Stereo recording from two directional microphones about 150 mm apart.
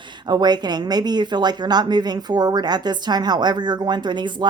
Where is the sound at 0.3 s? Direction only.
30° right (ahead or behind).